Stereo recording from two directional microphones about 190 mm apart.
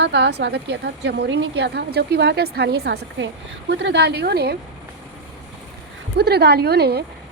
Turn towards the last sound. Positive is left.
turn(degrees=-60)  # may be behind; listen again after turning